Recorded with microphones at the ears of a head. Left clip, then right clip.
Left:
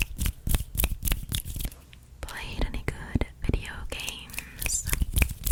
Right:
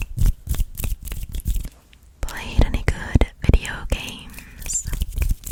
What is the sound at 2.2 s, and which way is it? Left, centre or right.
Whispering, right.